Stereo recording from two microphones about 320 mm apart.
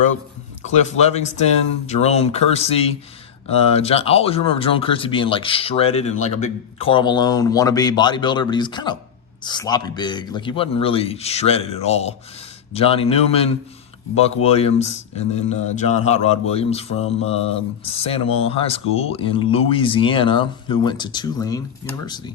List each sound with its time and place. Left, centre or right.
0.6 s a man's voice: left